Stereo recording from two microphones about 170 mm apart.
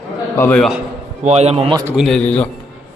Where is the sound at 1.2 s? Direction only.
40° right (ahead or behind).